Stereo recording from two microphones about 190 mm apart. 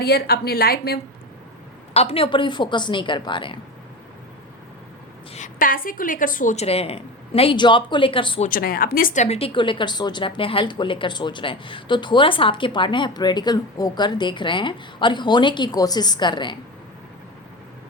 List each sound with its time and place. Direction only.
0.0 s a woman's voice: 55° left (ahead or behind)
1.9 s a woman's voice: 30° left (ahead or behind)
5.3 s a woman's voice: 40° left (ahead or behind); by 8.4 s 25° left (ahead or behind)
8.4 s a woman's voice: 50° left (ahead or behind); by 16.6 s 25° left (ahead or behind)